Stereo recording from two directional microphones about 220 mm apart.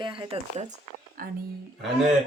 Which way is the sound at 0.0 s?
25° right (ahead or behind).